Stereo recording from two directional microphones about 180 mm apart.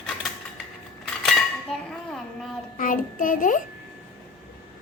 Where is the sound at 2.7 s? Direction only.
50° left (ahead or behind).